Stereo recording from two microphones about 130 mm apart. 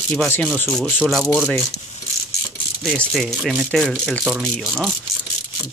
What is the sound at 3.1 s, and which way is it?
Speech, centre (ahead or behind).